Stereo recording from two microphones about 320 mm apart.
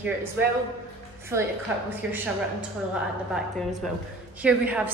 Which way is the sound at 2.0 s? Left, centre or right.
Centre.